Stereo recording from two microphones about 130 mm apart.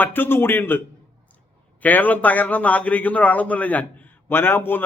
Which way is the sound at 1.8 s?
15° left (ahead or behind).